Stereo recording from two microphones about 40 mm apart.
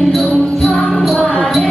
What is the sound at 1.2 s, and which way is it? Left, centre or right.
Music, left.